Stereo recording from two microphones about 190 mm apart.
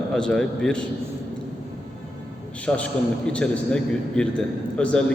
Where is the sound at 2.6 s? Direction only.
5° left (ahead or behind).